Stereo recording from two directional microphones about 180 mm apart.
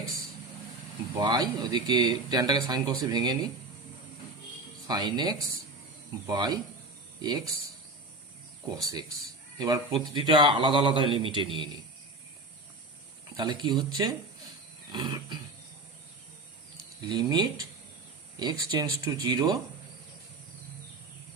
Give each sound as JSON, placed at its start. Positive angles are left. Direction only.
{"t": 1.2, "sound": "speech", "side_deg": -25}
{"t": 4.9, "sound": "speech", "side_deg": -25}
{"t": 8.7, "sound": "speech", "side_deg": -20}
{"t": 13.3, "sound": "speech", "side_deg": -25}
{"t": 17.1, "sound": "speech", "side_deg": -25}